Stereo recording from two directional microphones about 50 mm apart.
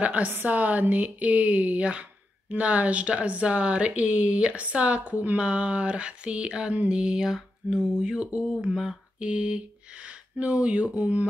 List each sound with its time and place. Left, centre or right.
0.0 s speech: right
6.9 s mantra: centre
9.2 s speech: right